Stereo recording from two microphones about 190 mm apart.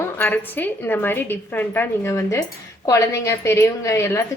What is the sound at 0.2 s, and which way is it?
A woman's voice, 10° left (ahead or behind).